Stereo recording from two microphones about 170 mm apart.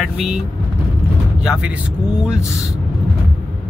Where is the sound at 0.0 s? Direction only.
5° right (ahead or behind).